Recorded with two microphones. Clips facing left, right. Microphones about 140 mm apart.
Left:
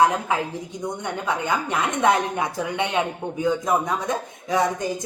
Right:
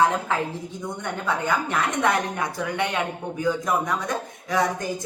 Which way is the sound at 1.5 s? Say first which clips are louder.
Even; 20° left (ahead or behind).